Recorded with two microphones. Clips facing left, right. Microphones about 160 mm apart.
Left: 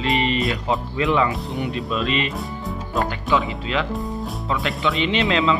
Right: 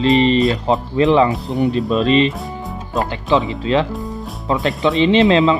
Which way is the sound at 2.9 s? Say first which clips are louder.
Right 4 dB; 20° right (ahead or behind).